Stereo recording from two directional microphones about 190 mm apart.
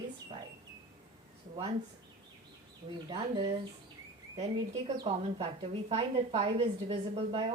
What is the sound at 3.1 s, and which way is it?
Speech, 30° right (ahead or behind).